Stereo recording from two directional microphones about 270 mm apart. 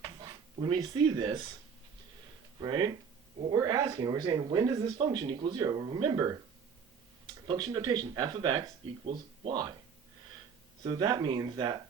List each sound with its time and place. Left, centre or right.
0.0 s a sound: centre
2.6 s speech: centre
7.4 s speech: centre
10.8 s speech: centre